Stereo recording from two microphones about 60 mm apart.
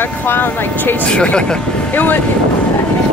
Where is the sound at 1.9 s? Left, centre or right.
Left.